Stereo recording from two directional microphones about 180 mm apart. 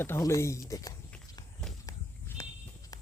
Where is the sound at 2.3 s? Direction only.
10° left (ahead or behind).